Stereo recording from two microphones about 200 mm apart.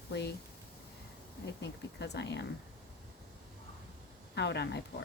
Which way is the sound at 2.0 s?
60° left (ahead or behind).